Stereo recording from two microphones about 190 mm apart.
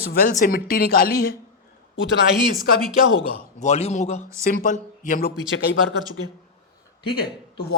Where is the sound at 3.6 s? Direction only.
35° left (ahead or behind).